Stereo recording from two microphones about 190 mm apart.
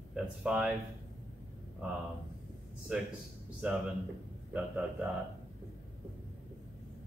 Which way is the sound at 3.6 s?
5° right (ahead or behind).